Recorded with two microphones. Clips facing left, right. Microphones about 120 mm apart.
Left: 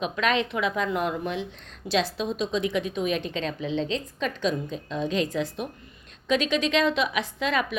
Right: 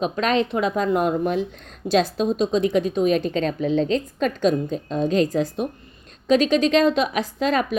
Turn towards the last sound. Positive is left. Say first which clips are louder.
# right 5 dB
turn(degrees=-40)  # may be behind; listen again after turning